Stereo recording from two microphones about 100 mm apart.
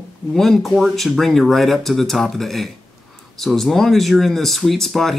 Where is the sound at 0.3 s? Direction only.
Centre (ahead or behind).